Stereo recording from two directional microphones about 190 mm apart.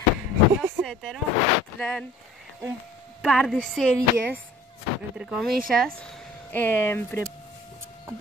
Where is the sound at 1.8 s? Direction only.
5° left (ahead or behind).